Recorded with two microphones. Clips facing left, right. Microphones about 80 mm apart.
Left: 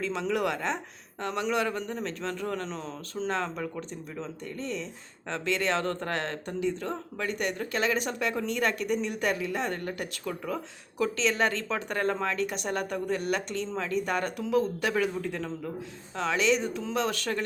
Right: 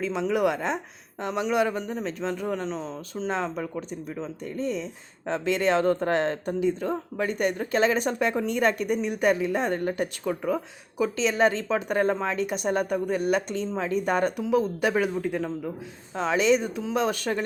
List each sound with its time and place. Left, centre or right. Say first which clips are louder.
0.0 s speech: right 4 dB; centre
3.2 s speech: right 3 dB; centre; by 10.5 s right
10.5 s speech: right 6 dB; centre